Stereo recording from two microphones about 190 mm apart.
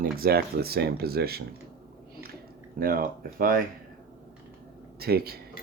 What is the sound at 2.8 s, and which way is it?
Speech, 50° right (ahead or behind).